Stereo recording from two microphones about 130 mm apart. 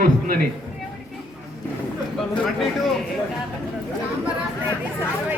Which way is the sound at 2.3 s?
Centre (ahead or behind).